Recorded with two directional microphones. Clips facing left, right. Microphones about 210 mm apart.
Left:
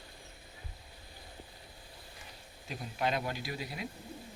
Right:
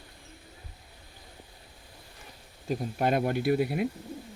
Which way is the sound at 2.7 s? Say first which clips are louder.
Right 7 dB; 50° right (ahead or behind).